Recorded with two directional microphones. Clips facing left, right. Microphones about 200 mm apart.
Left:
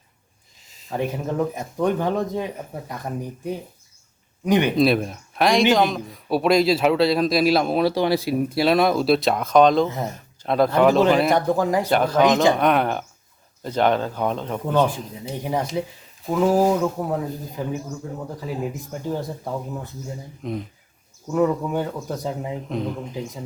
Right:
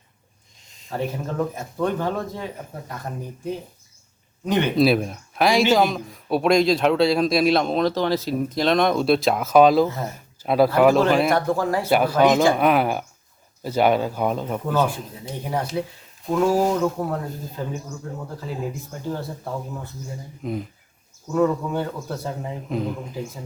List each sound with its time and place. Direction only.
0.7 s a sound: centre (ahead or behind)
0.9 s speech: 15° left (ahead or behind)
4.7 s speech: centre (ahead or behind)
11.3 s speech: 15° left (ahead or behind)
11.9 s speech: 10° right (ahead or behind)
15.4 s speech: 20° left (ahead or behind)
20.4 s speech: 5° right (ahead or behind)
21.3 s speech: 15° left (ahead or behind)
22.7 s speech: centre (ahead or behind)